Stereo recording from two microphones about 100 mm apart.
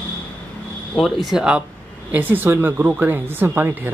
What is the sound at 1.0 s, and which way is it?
Speech, 5° right (ahead or behind).